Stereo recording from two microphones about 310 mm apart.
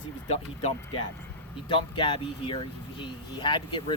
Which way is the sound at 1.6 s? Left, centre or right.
Centre.